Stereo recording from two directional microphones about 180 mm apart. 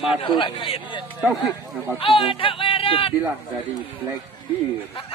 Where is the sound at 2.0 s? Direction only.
30° left (ahead or behind).